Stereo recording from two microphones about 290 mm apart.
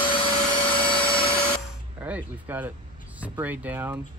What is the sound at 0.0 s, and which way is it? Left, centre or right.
Vacuum cleaner, centre.